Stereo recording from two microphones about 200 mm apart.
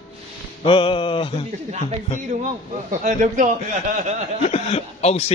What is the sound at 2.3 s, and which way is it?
Speech, 35° right (ahead or behind).